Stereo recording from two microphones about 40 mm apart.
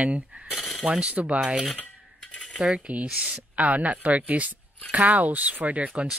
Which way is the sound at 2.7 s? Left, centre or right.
Right.